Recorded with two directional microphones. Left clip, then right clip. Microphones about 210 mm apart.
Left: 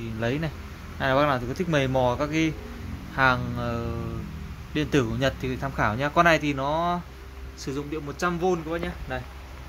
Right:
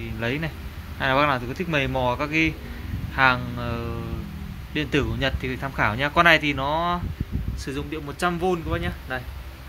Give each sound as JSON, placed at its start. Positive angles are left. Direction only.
{"t": 0.2, "sound": "speech", "side_deg": 5}